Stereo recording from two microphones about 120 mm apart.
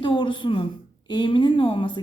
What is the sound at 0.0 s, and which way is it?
A woman's voice, 45° left (ahead or behind).